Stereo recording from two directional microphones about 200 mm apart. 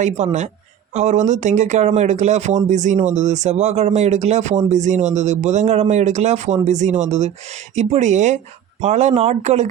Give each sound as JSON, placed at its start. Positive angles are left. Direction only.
{"t": 0.0, "sound": "speech", "side_deg": -35}